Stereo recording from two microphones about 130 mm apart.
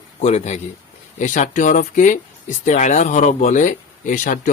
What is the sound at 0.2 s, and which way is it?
Speech, 60° left (ahead or behind).